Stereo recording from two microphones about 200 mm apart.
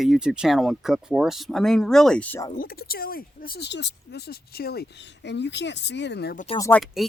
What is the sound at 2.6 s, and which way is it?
Speech, 45° left (ahead or behind).